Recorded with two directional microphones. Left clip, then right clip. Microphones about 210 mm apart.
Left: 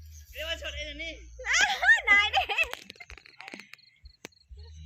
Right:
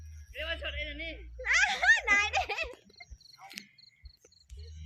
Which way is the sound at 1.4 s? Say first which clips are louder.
Left 2 dB; 35° left (ahead or behind).